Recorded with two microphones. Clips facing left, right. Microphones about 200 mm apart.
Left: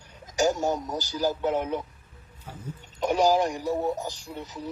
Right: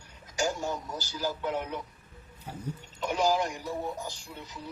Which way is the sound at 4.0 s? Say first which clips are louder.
Left 5 dB; 20° left (ahead or behind).